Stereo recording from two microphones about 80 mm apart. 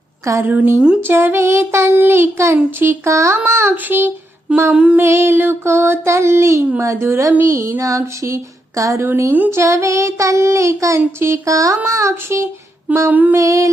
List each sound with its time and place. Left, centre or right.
0.4 s a woman's voice: right
1.0 s child singing: right
3.8 s a woman's voice: right
4.7 s a sound: centre
4.9 s child singing: right
13.1 s a woman's voice: right
13.3 s child singing: right